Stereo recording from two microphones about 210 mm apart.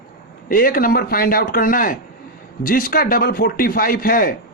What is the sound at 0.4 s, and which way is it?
A man's voice, 45° left (ahead or behind).